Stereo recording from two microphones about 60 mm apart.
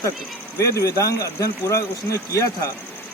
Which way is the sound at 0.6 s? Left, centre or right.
Left.